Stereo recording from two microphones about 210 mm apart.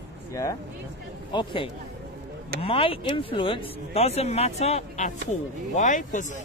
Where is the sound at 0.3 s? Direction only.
15° left (ahead or behind).